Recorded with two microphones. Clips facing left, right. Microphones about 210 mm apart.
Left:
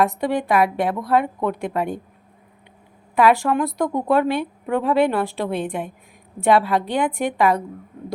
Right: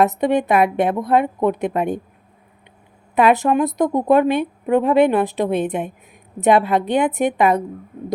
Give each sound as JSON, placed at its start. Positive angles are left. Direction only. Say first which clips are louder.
{"t": 0.0, "sound": "a woman's voice", "louder": "right 4 dB", "side_deg": -20}
{"t": 3.2, "sound": "a woman's voice", "louder": "right 2 dB", "side_deg": -20}